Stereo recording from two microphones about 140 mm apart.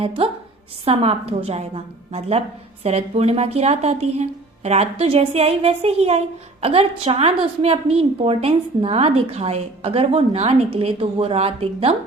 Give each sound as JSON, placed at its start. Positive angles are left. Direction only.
{"t": 0.2, "sound": "a woman's voice", "side_deg": -40}